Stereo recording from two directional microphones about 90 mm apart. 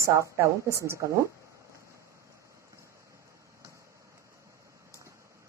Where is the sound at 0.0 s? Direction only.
35° right (ahead or behind).